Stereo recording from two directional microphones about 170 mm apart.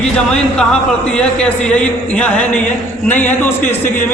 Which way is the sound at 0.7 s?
5° left (ahead or behind).